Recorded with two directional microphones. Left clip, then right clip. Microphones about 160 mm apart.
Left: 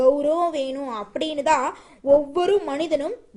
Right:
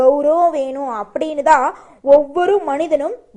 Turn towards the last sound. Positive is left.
turn(degrees=20)  # may be behind; listen again after turning